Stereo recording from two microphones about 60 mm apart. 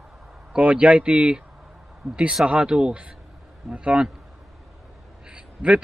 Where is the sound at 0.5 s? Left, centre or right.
Right.